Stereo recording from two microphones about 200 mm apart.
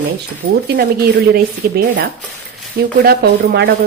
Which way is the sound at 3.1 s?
50° right (ahead or behind).